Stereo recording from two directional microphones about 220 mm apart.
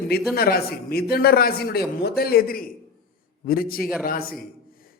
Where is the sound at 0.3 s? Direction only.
45° left (ahead or behind).